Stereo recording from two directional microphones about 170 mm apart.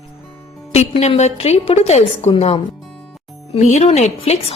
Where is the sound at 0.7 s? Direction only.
40° left (ahead or behind).